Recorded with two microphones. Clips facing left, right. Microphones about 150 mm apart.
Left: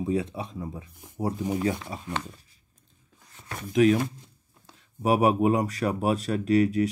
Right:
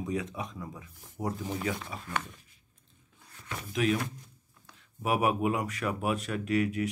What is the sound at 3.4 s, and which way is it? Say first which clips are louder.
Speech: left 9 dB; 40° left (ahead or behind).